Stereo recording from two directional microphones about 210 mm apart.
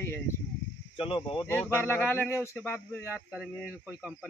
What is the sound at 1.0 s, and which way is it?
Speech, 25° left (ahead or behind).